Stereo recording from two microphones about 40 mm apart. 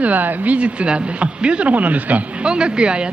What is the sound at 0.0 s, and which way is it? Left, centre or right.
A man's voice, right.